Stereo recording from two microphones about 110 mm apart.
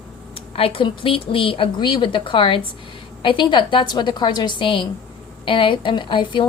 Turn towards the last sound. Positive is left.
turn(degrees=45)  # may be behind; listen again after turning